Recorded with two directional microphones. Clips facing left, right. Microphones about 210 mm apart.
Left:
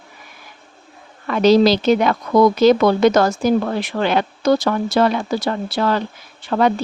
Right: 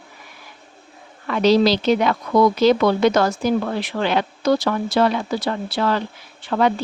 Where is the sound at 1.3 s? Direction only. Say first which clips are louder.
Left 3 dB; 45° left (ahead or behind).